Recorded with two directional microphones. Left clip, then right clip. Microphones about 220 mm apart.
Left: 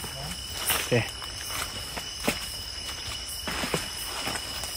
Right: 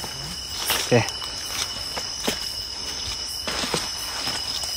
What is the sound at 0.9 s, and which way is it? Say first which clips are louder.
Speech: right 7 dB; 30° right (ahead or behind).